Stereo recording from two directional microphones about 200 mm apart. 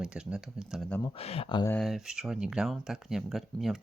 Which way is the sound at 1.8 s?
Centre (ahead or behind).